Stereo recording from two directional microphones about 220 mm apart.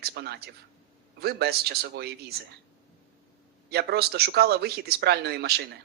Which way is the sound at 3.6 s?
45° right (ahead or behind).